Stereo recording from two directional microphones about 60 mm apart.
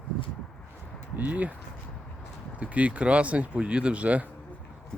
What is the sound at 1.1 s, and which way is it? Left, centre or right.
Speech, right.